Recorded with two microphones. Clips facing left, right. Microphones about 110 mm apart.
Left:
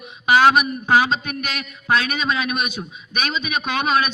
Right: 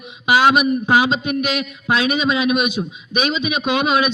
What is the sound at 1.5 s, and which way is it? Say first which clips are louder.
A man's voice: right 2 dB; 50° left (ahead or behind).